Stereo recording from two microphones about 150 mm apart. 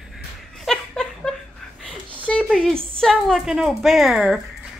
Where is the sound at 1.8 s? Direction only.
5° left (ahead or behind).